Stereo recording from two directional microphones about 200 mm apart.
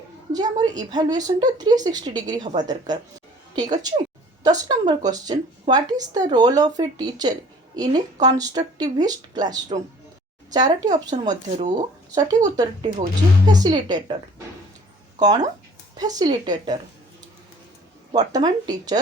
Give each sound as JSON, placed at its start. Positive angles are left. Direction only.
{"t": 0.3, "sound": "a woman's voice", "side_deg": -20}
{"t": 11.5, "sound": "speech", "side_deg": -40}
{"t": 12.1, "sound": "a woman's voice", "side_deg": -20}
{"t": 16.0, "sound": "a woman's voice", "side_deg": -20}
{"t": 18.1, "sound": "a woman's voice", "side_deg": -20}